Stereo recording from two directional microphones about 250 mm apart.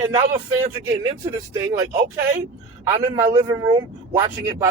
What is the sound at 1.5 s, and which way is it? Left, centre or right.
Speech, centre.